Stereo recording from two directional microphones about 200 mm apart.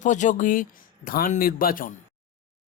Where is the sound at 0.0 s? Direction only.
35° left (ahead or behind).